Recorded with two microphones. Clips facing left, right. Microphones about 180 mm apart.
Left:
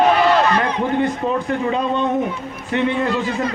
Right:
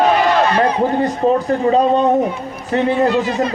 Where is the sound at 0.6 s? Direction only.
35° right (ahead or behind).